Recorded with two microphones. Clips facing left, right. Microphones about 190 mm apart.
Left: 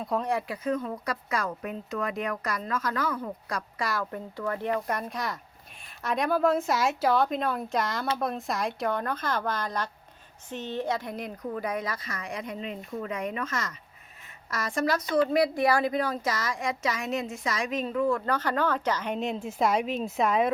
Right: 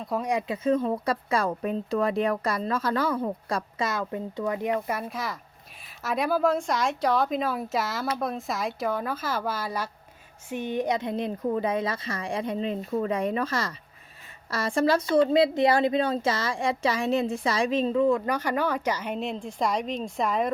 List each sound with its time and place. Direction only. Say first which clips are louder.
0.2 s speech: right 2 dB; 15° right (ahead or behind)
4.7 s speech: right 1 dB; 5° right (ahead or behind)